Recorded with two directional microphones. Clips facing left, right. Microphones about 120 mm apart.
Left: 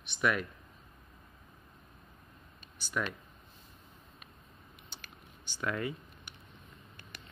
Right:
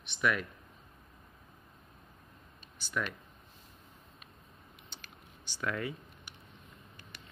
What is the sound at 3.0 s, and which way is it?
Speech, 15° left (ahead or behind).